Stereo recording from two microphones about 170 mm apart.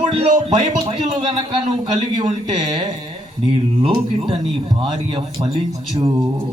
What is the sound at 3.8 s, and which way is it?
Speech, 30° right (ahead or behind).